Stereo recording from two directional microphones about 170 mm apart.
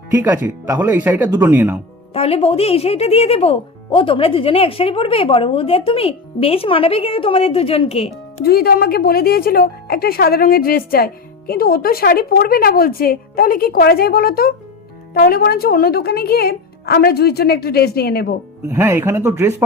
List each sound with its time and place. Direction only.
0.1 s speech: 20° right (ahead or behind)
2.1 s speech: 35° left (ahead or behind)
8.4 s speech: 65° left (ahead or behind)
18.7 s speech: 15° right (ahead or behind)